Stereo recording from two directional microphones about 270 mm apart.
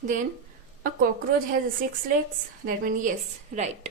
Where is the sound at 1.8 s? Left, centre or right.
Right.